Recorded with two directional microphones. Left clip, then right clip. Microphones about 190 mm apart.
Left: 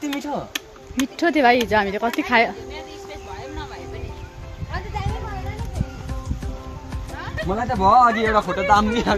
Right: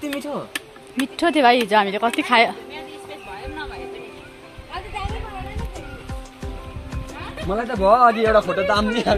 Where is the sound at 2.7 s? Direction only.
20° right (ahead or behind).